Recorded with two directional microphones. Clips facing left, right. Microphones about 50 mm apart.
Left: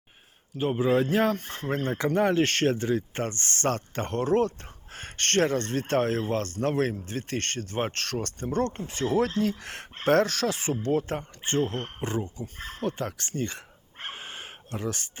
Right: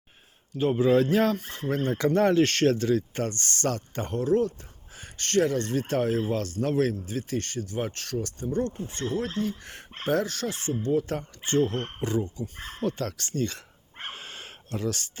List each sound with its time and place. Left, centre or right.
0.5 s speech: centre
1.5 s speech: left
2.3 s speech: left
4.9 s speech: left
8.0 s speech: left
11.1 s speech: left
14.2 s a sound: left